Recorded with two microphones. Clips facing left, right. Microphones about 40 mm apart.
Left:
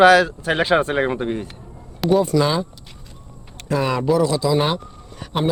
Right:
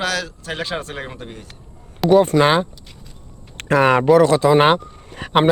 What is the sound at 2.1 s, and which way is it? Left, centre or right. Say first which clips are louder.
Speech: right 4 dB; right.